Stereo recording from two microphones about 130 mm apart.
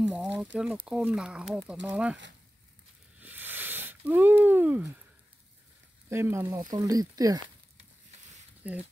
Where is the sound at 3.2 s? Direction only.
15° right (ahead or behind).